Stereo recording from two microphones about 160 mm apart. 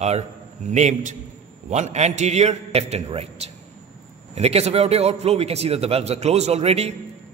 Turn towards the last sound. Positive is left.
turn(degrees=-40)  # may be behind; listen again after turning